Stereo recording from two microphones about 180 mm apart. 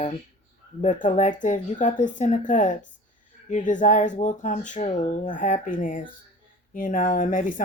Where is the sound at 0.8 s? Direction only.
45° left (ahead or behind).